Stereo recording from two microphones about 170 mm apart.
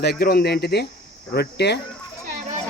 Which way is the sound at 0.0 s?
70° left (ahead or behind).